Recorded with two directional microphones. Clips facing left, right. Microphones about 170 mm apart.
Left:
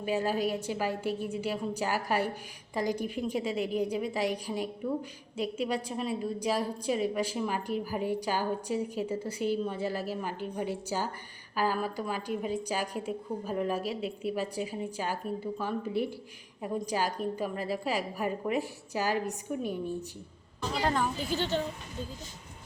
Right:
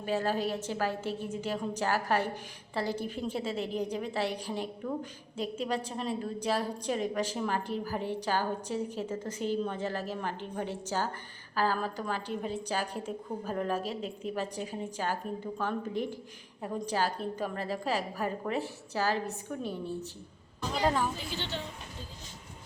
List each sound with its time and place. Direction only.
0.0 s a woman's voice: 10° left (ahead or behind)
20.8 s a woman's voice: centre (ahead or behind)
21.2 s a woman's voice: 45° left (ahead or behind)